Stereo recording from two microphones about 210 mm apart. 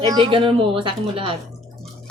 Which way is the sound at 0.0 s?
20° right (ahead or behind).